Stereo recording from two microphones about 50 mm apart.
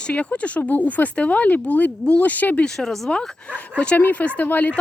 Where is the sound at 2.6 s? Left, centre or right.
Centre.